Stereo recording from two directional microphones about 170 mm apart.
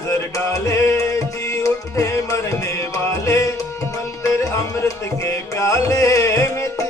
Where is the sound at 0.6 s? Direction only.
15° left (ahead or behind).